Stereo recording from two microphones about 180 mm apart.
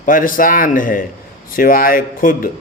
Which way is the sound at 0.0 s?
50° left (ahead or behind).